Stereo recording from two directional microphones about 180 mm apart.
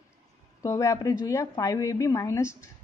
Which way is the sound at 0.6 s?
20° left (ahead or behind).